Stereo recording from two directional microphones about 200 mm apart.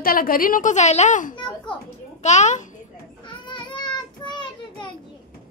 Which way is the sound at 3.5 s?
20° left (ahead or behind).